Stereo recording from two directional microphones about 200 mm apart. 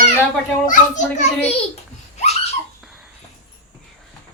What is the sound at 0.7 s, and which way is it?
Speech, 35° left (ahead or behind).